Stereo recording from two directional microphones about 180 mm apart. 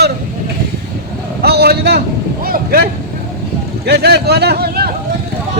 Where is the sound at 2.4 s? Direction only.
55° right (ahead or behind).